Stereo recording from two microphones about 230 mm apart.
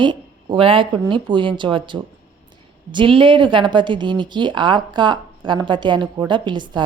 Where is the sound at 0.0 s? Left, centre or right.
Right.